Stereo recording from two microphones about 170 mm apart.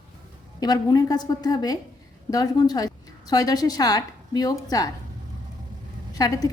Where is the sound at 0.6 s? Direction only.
25° left (ahead or behind).